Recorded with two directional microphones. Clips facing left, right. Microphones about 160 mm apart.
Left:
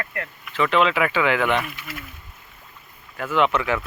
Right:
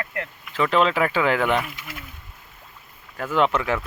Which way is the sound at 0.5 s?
35° right (ahead or behind).